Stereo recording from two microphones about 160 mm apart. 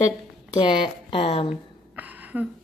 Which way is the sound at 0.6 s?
30° left (ahead or behind).